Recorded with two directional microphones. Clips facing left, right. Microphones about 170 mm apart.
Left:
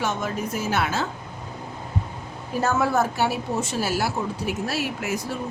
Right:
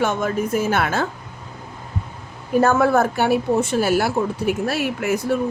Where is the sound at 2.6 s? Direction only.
55° right (ahead or behind).